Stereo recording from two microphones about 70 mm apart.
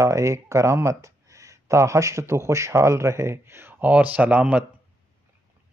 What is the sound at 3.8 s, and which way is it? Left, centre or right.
Speech, right.